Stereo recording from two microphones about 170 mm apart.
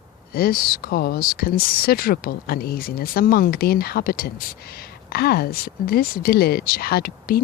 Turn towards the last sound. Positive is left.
turn(degrees=65)  # may be behind; listen again after turning